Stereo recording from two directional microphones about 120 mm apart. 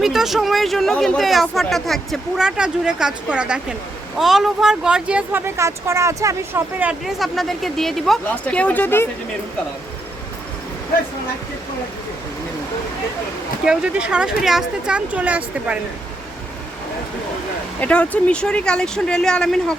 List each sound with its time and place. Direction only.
0.0 s speech: 5° right (ahead or behind)
5.5 s speech: 25° right (ahead or behind)
7.0 s speech: centre (ahead or behind); by 9.0 s 15° left (ahead or behind)
13.7 s speech: 10° right (ahead or behind)
17.7 s speech: 10° left (ahead or behind)